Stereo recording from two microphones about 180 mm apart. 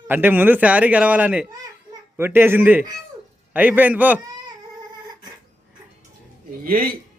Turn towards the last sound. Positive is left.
turn(degrees=-55)  # may be behind; listen again after turning